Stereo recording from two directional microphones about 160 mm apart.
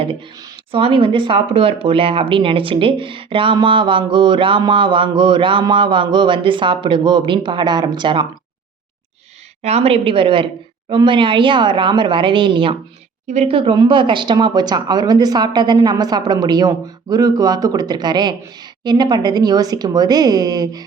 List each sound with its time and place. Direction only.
0.7 s speech: 35° right (ahead or behind)
9.6 s speech: 40° right (ahead or behind)
13.2 s speech: 40° right (ahead or behind); by 20.8 s 25° right (ahead or behind)